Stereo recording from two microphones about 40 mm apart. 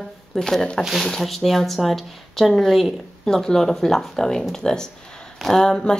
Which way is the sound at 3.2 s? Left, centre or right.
Centre.